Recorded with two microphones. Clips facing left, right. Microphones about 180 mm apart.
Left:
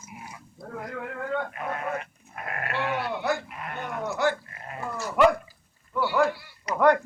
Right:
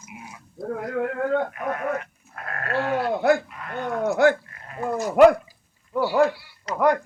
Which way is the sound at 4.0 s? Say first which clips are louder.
Right 8 dB; 55° right (ahead or behind).